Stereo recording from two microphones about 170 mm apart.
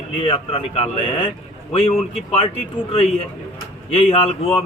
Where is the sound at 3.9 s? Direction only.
35° left (ahead or behind).